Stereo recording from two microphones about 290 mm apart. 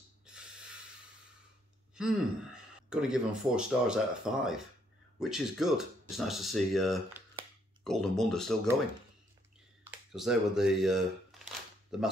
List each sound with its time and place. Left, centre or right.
2.0 s speech: centre
9.8 s speech: centre